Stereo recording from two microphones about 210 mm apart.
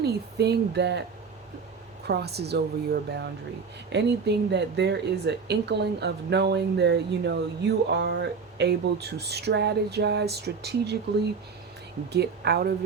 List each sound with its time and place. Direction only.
0.0 s speech: 50° right (ahead or behind)
2.0 s speech: 50° right (ahead or behind)
12.1 s speech: 50° right (ahead or behind)